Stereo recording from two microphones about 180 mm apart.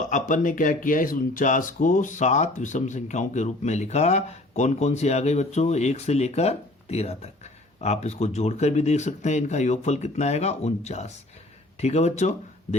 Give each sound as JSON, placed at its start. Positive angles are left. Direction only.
{"t": 0.1, "sound": "speech", "side_deg": 45}